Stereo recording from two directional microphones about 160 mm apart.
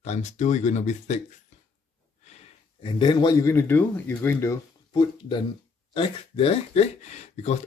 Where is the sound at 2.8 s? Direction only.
30° left (ahead or behind).